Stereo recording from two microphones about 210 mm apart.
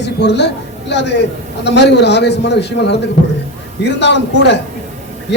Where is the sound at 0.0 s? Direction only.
55° left (ahead or behind).